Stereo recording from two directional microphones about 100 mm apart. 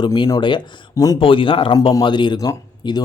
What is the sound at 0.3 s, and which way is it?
Speech, 45° left (ahead or behind).